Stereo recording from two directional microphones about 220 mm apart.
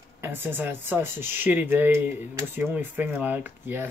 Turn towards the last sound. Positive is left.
turn(degrees=-10)  # may be behind; listen again after turning